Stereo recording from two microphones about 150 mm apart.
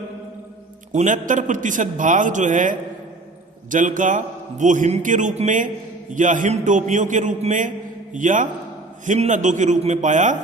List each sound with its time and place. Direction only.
0.9 s a man's voice: 60° right (ahead or behind)